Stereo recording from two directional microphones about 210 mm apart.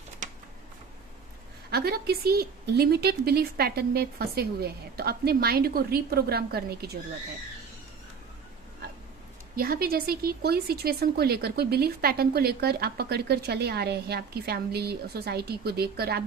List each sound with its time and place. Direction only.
0.2 s a sound: 35° right (ahead or behind)
1.7 s speech: 50° right (ahead or behind)
9.6 s speech: 45° right (ahead or behind)